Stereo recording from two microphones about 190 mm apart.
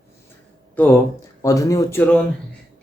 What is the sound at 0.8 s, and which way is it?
Speech, 10° left (ahead or behind).